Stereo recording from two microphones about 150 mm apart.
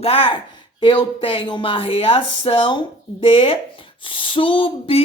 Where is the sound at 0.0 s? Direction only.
40° left (ahead or behind).